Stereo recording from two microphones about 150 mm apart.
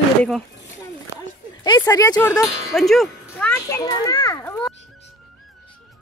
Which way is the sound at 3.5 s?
20° left (ahead or behind).